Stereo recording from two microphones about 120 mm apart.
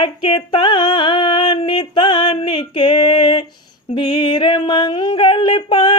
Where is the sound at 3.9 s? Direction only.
45° left (ahead or behind).